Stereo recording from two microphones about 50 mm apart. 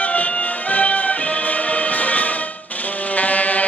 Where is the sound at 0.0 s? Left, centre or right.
Left.